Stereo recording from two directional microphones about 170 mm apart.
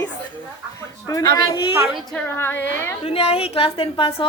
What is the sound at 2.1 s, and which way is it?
Speech, 10° left (ahead or behind).